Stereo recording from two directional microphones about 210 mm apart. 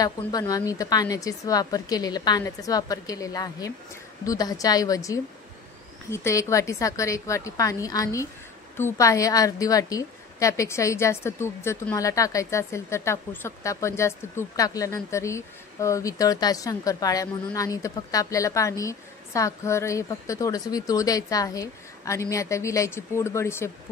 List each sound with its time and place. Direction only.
0.0 s a woman's voice: 15° left (ahead or behind)